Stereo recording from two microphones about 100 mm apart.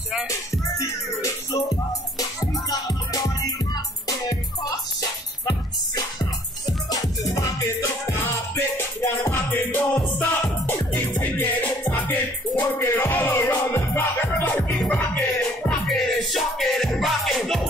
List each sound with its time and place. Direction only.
0.3 s music: 30° left (ahead or behind); by 15.8 s 15° left (ahead or behind)
15.9 s music: centre (ahead or behind)